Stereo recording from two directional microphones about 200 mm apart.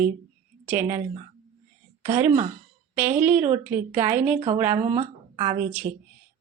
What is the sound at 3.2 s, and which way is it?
Speech, 10° right (ahead or behind).